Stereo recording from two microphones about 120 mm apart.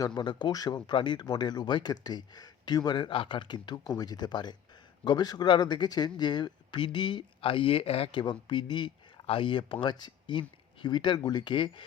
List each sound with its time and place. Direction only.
0.0 s speech: 35° left (ahead or behind); by 8.2 s 55° left (ahead or behind)
8.2 s speech: 40° left (ahead or behind)